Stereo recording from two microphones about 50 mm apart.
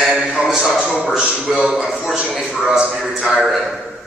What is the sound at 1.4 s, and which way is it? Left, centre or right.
A man's voice, centre.